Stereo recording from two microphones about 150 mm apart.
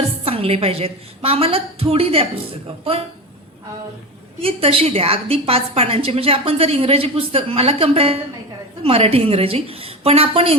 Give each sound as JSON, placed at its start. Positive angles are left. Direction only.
{"t": 0.3, "sound": "a woman's voice", "side_deg": -40}
{"t": 4.4, "sound": "a woman's voice", "side_deg": -40}